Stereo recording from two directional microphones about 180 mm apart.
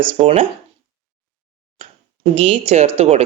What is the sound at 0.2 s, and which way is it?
Speech, 35° right (ahead or behind).